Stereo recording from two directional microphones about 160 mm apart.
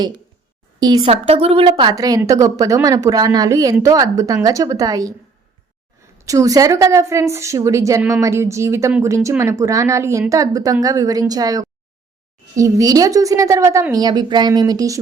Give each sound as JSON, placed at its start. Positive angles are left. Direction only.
{"t": 0.8, "sound": "speech", "side_deg": -25}
{"t": 1.0, "sound": "a woman's voice", "side_deg": -40}
{"t": 6.1, "sound": "a woman's voice", "side_deg": -20}